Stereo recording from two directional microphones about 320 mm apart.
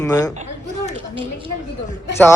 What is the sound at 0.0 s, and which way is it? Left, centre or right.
Speech, centre.